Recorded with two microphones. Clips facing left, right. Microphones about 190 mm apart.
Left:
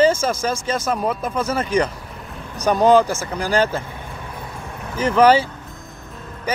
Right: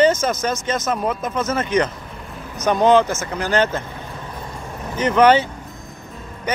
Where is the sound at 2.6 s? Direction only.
10° left (ahead or behind).